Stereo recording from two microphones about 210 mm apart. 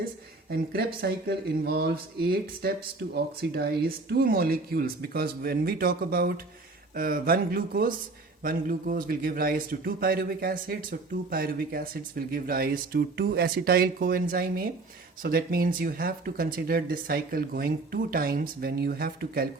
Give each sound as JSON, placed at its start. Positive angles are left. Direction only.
{"t": 1.0, "sound": "a man's voice", "side_deg": -50}